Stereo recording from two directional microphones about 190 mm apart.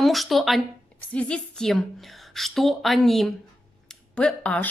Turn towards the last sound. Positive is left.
turn(degrees=5)  # may be behind; listen again after turning